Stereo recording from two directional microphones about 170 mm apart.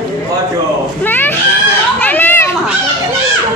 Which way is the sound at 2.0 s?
10° left (ahead or behind).